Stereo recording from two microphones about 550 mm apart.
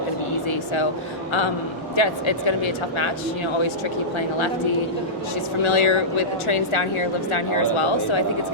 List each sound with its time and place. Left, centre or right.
0.4 s vehicle: left
2.0 s speech: left
5.6 s speech: left